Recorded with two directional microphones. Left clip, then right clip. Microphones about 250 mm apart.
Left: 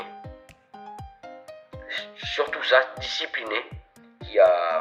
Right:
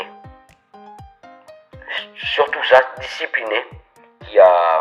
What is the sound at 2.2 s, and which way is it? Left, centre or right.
Speech, centre.